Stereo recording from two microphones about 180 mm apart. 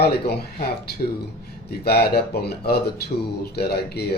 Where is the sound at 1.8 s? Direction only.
60° left (ahead or behind).